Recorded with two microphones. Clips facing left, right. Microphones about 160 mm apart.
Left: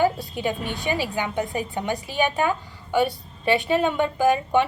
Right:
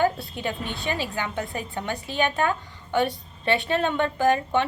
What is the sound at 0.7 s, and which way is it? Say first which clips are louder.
A woman's voice: left 3 dB; 15° left (ahead or behind).